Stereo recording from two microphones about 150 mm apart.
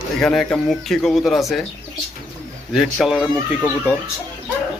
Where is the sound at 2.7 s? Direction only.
5° right (ahead or behind).